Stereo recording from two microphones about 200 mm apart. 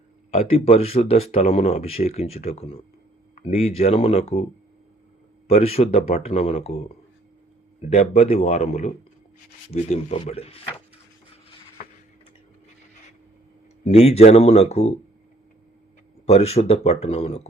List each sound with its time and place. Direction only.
0.3 s speech: 30° left (ahead or behind)
5.5 s speech: 30° left (ahead or behind)
13.8 s speech: 30° left (ahead or behind)
16.2 s speech: 30° left (ahead or behind)